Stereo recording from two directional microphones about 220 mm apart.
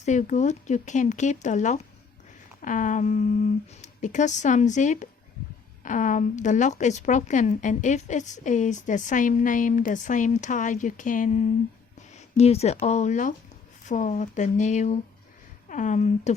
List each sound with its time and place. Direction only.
0.0 s speech: 35° left (ahead or behind)